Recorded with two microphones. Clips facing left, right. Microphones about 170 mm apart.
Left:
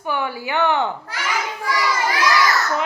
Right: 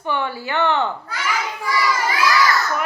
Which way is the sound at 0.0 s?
10° left (ahead or behind).